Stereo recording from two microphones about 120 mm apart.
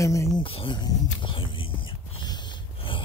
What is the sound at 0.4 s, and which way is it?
Speech, 50° left (ahead or behind).